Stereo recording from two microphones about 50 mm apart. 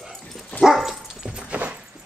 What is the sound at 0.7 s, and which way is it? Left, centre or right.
Dog, centre.